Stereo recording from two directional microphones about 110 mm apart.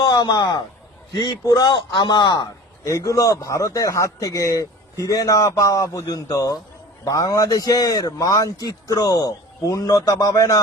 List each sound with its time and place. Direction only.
0.0 s a man's voice: 35° left (ahead or behind)
2.8 s speech: 25° left (ahead or behind)